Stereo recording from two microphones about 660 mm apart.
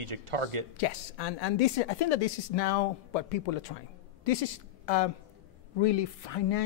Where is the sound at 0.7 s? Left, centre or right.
Left.